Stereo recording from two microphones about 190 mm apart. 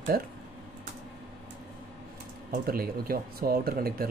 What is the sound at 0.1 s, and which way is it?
Speech, 50° right (ahead or behind).